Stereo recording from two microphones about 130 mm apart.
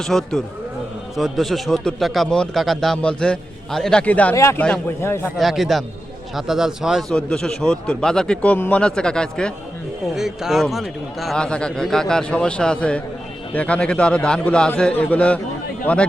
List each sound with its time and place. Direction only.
0.0 s a man's voice: 5° left (ahead or behind)
4.4 s a man's voice: 20° left (ahead or behind)
5.4 s a man's voice: centre (ahead or behind)
7.1 s a man's voice: 5° left (ahead or behind)